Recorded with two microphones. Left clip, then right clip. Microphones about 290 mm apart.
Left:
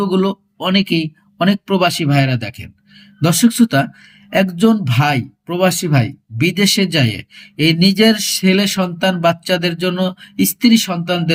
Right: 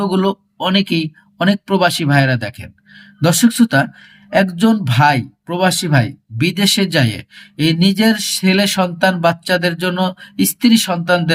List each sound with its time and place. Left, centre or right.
0.0 s speech: centre
2.3 s speech: right
3.2 s speech: centre